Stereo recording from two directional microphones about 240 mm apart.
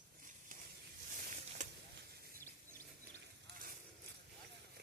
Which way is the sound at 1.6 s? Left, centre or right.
Right.